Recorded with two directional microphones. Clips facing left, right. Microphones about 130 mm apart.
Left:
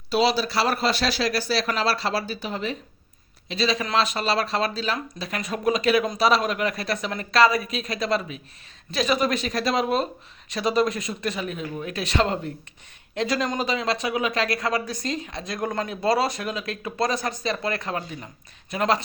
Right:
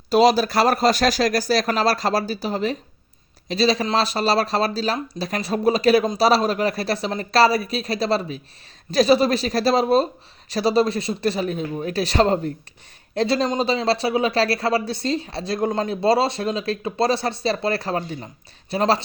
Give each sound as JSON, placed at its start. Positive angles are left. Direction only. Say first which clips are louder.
{"t": 0.1, "sound": "speech", "louder": "right 6 dB", "side_deg": -45}